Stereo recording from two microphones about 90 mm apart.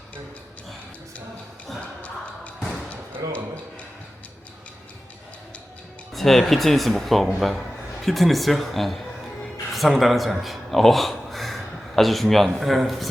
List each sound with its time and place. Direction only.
3.2 s speech: 40° right (ahead or behind)
6.1 s speech: centre (ahead or behind)
9.4 s music: centre (ahead or behind)
12.5 s speech: centre (ahead or behind)